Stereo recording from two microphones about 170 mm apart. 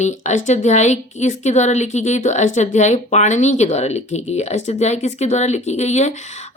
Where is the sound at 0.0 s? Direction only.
45° left (ahead or behind).